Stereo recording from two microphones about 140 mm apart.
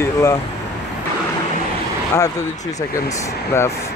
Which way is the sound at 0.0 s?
20° left (ahead or behind).